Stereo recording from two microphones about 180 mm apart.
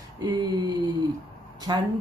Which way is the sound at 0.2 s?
20° right (ahead or behind).